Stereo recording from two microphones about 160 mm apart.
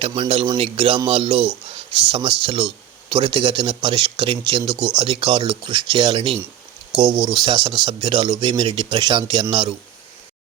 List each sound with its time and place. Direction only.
0.2 s speech: 35° right (ahead or behind)
7.4 s speech: 35° right (ahead or behind)